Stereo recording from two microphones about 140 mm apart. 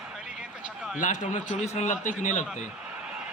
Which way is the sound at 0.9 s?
65° left (ahead or behind).